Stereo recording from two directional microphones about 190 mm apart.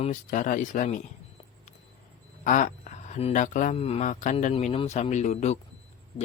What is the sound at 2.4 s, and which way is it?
Speech, 40° left (ahead or behind).